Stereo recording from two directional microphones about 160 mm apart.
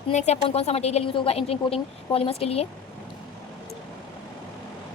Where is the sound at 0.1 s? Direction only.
45° left (ahead or behind).